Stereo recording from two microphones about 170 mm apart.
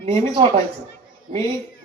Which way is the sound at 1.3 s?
35° right (ahead or behind).